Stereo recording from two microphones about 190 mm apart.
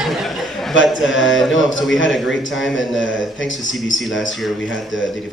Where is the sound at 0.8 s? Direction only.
Centre (ahead or behind).